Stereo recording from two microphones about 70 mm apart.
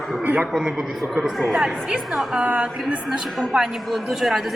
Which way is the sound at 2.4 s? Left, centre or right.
Centre.